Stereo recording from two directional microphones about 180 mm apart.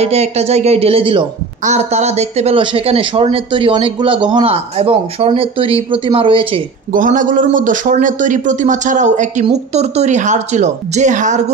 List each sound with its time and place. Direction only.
0.0 s a woman's voice: 35° right (ahead or behind)
6.9 s a man's voice: 50° right (ahead or behind)